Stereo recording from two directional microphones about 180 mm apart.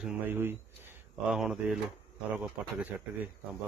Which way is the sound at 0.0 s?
10° right (ahead or behind).